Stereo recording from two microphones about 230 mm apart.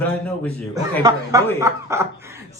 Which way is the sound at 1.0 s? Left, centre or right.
Centre.